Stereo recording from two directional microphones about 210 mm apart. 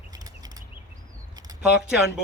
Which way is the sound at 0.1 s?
15° right (ahead or behind).